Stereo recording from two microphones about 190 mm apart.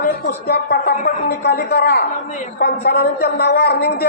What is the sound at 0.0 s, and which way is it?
A man's voice, 55° left (ahead or behind).